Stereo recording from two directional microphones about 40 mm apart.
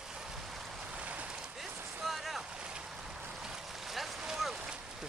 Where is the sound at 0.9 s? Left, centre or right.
Right.